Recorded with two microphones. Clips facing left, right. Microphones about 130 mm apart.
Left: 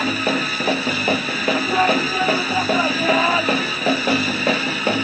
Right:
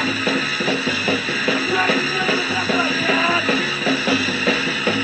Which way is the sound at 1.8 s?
35° left (ahead or behind).